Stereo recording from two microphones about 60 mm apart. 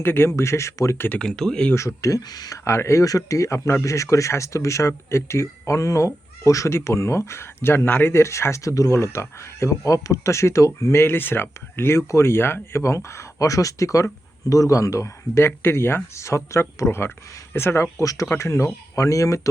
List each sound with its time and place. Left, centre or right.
0.0 s speech: left
0.3 s speech: left
1.2 s speech: centre
2.0 s speech: left
2.6 s speech: left
11.0 s speech: left
11.9 s speech: left
16.1 s speech: left
17.9 s speech: left